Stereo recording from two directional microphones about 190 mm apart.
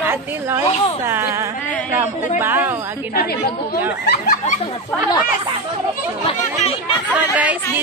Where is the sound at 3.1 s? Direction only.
50° left (ahead or behind).